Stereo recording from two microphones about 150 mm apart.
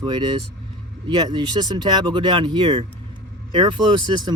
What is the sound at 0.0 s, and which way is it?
Speech, 30° right (ahead or behind).